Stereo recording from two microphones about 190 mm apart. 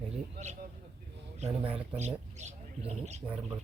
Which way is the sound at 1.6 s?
35° right (ahead or behind).